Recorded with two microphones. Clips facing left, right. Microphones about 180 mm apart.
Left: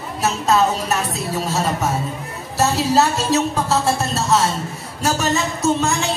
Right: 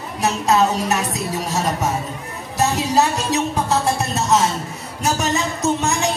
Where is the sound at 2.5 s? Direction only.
15° right (ahead or behind).